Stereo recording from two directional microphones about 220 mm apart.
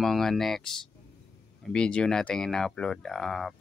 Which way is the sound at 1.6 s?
5° left (ahead or behind).